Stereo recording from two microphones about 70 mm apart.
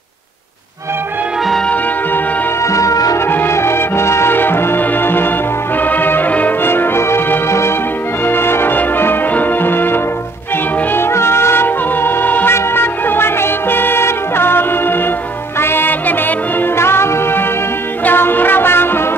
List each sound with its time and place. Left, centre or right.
2.6 s music: left
3.3 s music: left
16.7 s music: left